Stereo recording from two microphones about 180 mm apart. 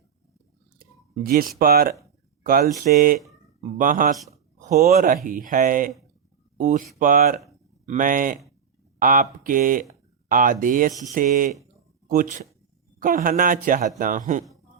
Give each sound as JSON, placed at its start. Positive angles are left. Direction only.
{"t": 1.2, "sound": "speech", "side_deg": -55}